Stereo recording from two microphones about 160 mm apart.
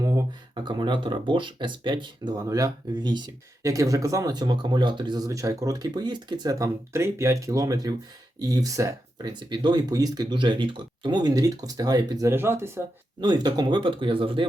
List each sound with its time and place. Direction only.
0.0 s speech: 20° right (ahead or behind)
13.2 s speech: 25° right (ahead or behind)